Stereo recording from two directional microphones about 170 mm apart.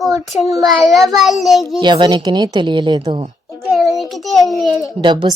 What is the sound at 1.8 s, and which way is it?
Speech, 25° right (ahead or behind).